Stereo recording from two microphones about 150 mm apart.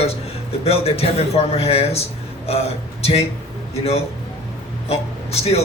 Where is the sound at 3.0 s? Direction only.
45° left (ahead or behind).